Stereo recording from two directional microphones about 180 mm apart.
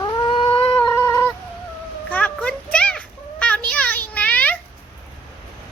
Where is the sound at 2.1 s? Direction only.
10° left (ahead or behind).